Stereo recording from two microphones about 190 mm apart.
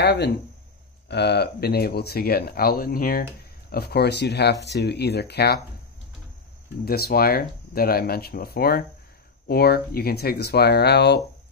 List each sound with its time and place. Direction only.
0.0 s speech: 60° left (ahead or behind)
6.8 s speech: 55° left (ahead or behind)